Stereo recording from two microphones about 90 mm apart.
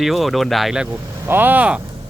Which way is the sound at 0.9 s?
25° right (ahead or behind).